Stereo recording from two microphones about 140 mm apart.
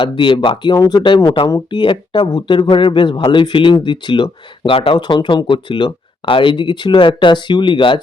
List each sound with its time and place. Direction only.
0.0 s speech: 35° left (ahead or behind)